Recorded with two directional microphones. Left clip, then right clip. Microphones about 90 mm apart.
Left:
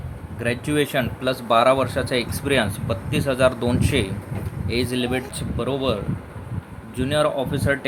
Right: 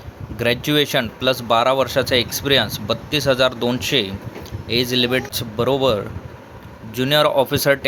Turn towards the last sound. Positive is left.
turn(degrees=-90)